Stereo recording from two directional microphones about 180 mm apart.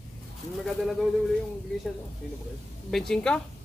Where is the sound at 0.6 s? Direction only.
Centre (ahead or behind).